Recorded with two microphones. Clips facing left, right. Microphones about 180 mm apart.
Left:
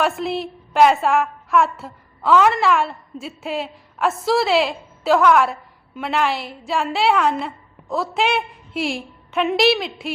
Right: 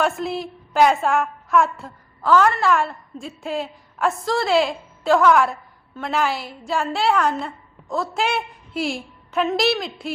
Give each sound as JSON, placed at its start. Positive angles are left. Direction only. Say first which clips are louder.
{"t": 0.0, "sound": "a woman's voice", "louder": "left 1 dB", "side_deg": 0}